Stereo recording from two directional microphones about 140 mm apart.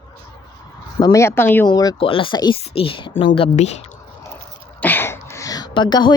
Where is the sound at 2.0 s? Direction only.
40° left (ahead or behind).